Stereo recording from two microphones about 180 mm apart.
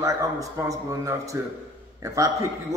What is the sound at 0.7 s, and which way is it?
A man's voice, 20° right (ahead or behind).